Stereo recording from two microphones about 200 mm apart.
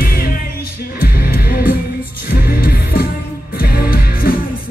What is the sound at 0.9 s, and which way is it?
Music, 50° left (ahead or behind).